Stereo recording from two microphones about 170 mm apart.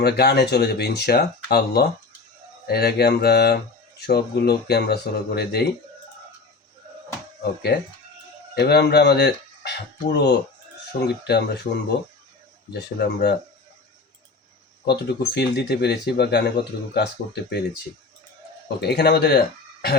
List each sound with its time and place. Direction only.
0.0 s speech: 70° left (ahead or behind)
7.7 s speech: 65° left (ahead or behind)
14.8 s speech: 75° left (ahead or behind)
18.8 s speech: 75° left (ahead or behind)